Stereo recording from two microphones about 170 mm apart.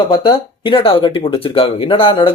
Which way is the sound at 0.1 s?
30° left (ahead or behind).